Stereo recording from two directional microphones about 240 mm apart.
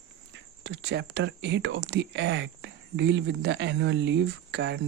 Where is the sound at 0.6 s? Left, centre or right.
Right.